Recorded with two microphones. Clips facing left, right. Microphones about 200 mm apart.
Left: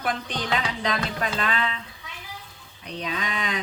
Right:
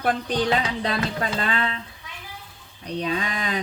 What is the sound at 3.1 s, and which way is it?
Speech, 35° right (ahead or behind).